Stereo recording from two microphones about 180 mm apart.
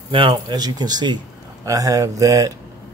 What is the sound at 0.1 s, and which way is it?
Speech, 25° right (ahead or behind).